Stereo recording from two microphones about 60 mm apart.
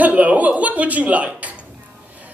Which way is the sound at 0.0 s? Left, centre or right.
Right.